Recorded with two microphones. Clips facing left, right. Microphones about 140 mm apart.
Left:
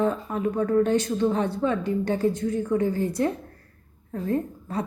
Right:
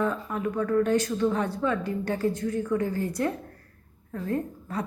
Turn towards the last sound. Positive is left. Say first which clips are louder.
# left 3 dB
turn(degrees=25)  # may be behind; listen again after turning